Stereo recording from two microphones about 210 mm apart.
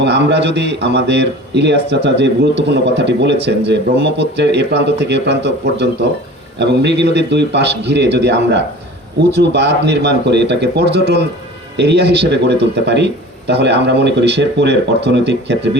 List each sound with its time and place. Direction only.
0.0 s a man's voice: 55° right (ahead or behind)